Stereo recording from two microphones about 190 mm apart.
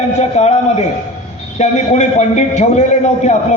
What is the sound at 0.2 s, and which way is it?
A man's voice, 35° left (ahead or behind).